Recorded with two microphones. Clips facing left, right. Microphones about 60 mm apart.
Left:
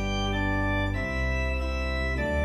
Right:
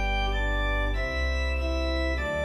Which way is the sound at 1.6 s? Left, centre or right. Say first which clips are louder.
Right 2 dB; centre.